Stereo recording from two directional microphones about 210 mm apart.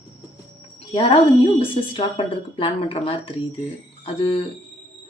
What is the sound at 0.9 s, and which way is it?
Speech, 25° left (ahead or behind).